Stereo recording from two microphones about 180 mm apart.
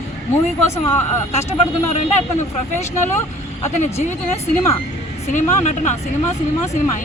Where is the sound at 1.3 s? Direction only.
35° left (ahead or behind).